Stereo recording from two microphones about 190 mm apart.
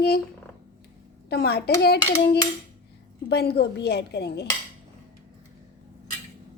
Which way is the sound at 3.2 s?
60° left (ahead or behind).